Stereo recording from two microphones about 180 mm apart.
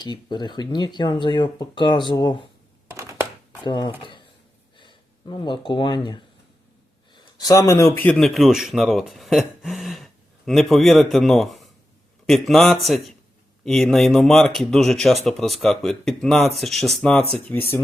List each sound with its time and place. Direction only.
0.0 s speech: 25° left (ahead or behind)
2.9 s crushing: 15° right (ahead or behind)
3.6 s speech: 25° left (ahead or behind)
7.3 s speech: 20° left (ahead or behind)